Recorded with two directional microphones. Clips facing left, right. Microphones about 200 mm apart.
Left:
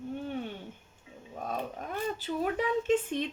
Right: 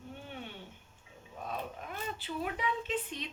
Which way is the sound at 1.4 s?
45° left (ahead or behind).